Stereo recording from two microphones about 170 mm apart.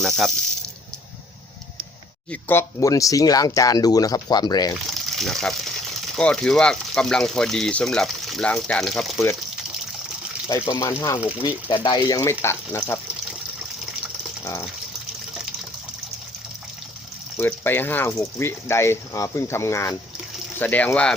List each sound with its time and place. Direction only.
0.0 s speech: centre (ahead or behind)
2.3 s speech: 15° left (ahead or behind)
4.7 s speech: centre (ahead or behind)
10.7 s speech: 20° left (ahead or behind)
17.3 s speech: 10° left (ahead or behind)